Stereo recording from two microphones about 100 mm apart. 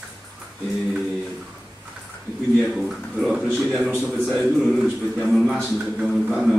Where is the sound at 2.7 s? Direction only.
Centre (ahead or behind).